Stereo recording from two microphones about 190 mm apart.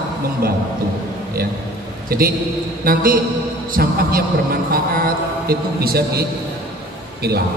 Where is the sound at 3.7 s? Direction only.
50° right (ahead or behind).